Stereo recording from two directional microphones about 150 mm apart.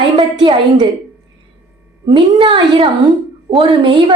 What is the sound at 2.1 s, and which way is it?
A woman's voice, 30° right (ahead or behind).